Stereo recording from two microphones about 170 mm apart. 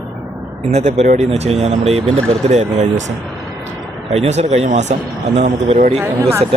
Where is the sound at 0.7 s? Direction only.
40° right (ahead or behind).